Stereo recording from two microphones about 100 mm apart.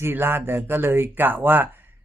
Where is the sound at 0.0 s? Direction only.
20° right (ahead or behind).